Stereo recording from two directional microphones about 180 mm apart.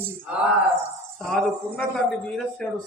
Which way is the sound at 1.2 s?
5° left (ahead or behind).